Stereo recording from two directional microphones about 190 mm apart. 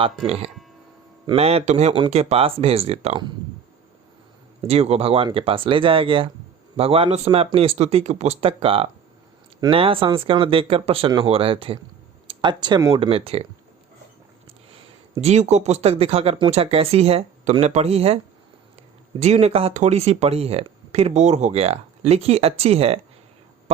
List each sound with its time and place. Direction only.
1.3 s speech: 30° right (ahead or behind)
4.6 s speech: 30° right (ahead or behind)
15.2 s speech: 35° right (ahead or behind)
19.2 s speech: 35° right (ahead or behind)